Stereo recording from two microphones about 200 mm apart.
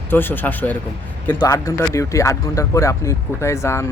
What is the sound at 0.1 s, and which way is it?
Speech, 10° left (ahead or behind).